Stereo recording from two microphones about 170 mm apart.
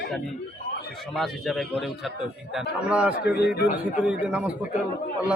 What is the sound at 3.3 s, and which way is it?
Speech, 75° left (ahead or behind).